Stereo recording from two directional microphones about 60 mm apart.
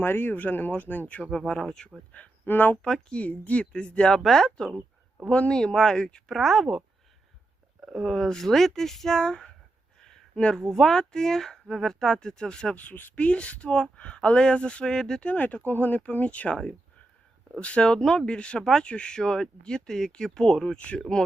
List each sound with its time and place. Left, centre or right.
0.0 s speech: left; by 1.9 s centre
2.4 s speech: left
2.8 s speech: centre
4.1 s speech: centre
6.3 s speech: centre
7.9 s speech: centre
10.0 s a sound: centre
10.6 s speech: centre
15.3 s speech: left
17.6 s speech: centre